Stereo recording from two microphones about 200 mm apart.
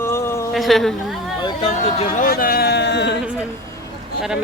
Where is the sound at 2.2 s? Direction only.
45° left (ahead or behind).